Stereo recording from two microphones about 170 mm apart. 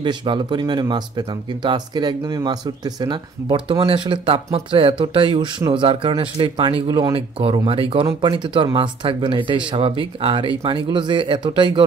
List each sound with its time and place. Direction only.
0.0 s speech: 25° right (ahead or behind)